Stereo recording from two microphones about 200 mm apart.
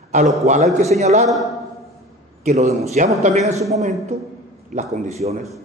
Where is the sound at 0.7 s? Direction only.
35° right (ahead or behind).